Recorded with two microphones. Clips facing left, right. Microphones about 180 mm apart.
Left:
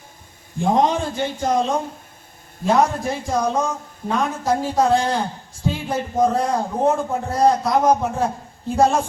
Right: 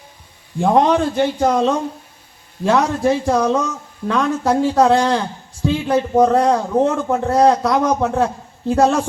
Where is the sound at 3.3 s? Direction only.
65° right (ahead or behind).